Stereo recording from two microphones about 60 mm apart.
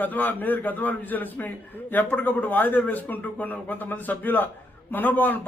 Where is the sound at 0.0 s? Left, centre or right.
Left.